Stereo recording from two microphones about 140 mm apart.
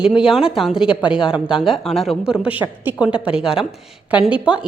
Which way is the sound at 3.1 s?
40° left (ahead or behind).